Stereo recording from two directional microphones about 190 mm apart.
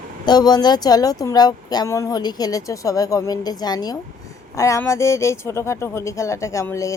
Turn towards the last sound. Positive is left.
turn(degrees=15)  # may be behind; listen again after turning